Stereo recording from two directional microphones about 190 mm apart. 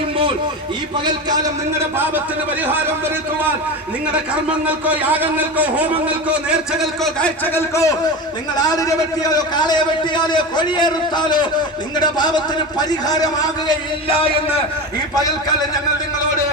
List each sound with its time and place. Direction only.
4.1 s a man's voice: 5° right (ahead or behind)
7.0 s a man's voice: 5° left (ahead or behind); by 14.6 s 30° left (ahead or behind)